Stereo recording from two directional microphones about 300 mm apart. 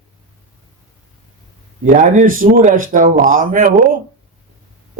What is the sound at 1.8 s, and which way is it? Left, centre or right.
Speech, right.